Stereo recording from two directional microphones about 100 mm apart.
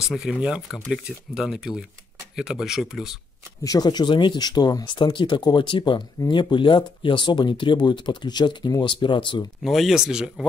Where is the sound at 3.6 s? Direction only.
40° left (ahead or behind).